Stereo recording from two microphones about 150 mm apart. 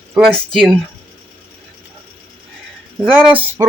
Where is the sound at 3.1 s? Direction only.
10° right (ahead or behind).